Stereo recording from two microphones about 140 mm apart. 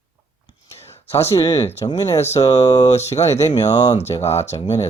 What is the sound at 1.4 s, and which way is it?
Speech, 25° left (ahead or behind).